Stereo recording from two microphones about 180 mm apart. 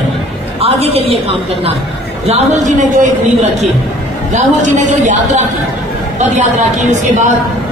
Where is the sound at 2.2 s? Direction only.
35° right (ahead or behind).